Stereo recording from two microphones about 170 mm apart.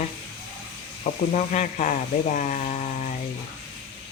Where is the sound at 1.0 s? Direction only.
45° left (ahead or behind).